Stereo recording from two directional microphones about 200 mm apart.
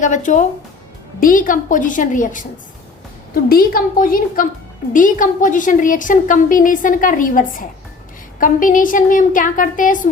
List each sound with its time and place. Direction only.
0.0 s a woman's voice: 40° left (ahead or behind)
3.5 s a woman's voice: 45° left (ahead or behind)